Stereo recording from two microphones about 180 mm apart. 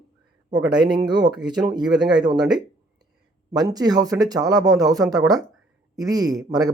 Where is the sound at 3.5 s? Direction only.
20° right (ahead or behind).